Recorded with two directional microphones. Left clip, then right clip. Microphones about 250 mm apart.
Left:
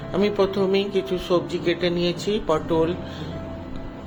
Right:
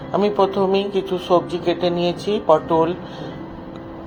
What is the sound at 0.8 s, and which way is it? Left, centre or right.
Speech, left.